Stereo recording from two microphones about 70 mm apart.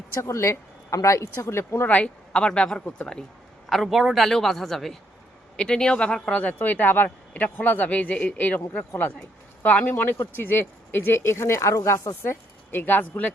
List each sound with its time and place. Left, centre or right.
0.2 s speech: left
1.9 s a woman's voice: centre
3.7 s a man's voice: centre; by 8.6 s left
9.6 s speech: left
12.2 s a woman's voice: left